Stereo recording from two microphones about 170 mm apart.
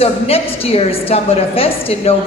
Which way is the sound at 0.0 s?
35° left (ahead or behind).